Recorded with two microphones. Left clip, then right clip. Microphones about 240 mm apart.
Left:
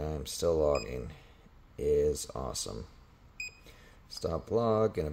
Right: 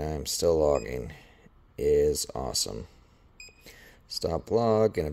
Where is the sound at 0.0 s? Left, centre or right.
Right.